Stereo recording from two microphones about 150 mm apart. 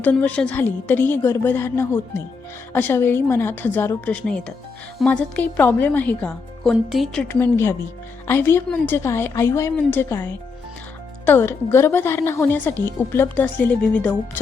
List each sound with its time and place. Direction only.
0.0 s a woman's voice: 10° left (ahead or behind)
7.3 s a woman's voice: 15° left (ahead or behind)